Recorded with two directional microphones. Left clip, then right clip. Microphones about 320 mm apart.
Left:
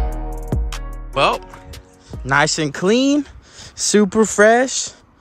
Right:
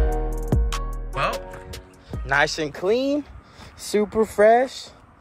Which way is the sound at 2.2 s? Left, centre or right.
Left.